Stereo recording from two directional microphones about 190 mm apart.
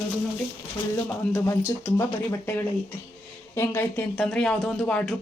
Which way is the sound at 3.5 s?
15° left (ahead or behind).